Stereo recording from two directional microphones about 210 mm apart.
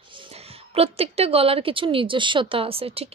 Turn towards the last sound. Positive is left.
turn(degrees=-25)  # may be behind; listen again after turning